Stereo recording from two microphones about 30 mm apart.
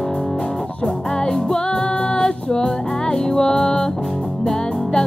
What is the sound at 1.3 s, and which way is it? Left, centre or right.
Music, left.